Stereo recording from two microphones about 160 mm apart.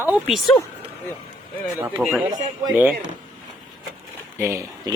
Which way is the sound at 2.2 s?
25° right (ahead or behind).